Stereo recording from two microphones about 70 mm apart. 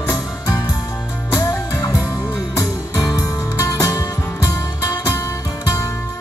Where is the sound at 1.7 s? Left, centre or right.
Left.